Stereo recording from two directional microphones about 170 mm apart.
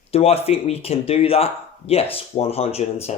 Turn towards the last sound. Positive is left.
turn(degrees=35)  # may be behind; listen again after turning